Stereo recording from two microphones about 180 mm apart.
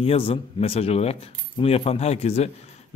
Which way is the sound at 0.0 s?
30° left (ahead or behind).